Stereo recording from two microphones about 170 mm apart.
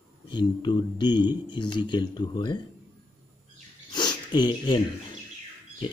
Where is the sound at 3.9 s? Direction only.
25° left (ahead or behind).